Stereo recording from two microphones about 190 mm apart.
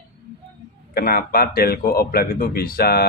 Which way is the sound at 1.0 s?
55° left (ahead or behind).